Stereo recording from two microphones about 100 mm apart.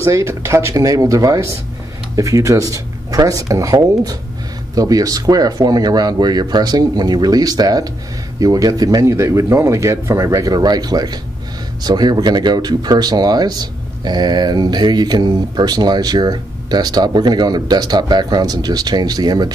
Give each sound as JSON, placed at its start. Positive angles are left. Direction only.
{"t": 0.0, "sound": "speech", "side_deg": -30}